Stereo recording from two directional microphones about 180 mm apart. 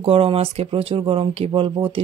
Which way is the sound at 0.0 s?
30° right (ahead or behind).